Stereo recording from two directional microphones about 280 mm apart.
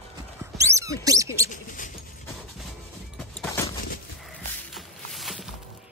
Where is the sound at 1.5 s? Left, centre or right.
Left.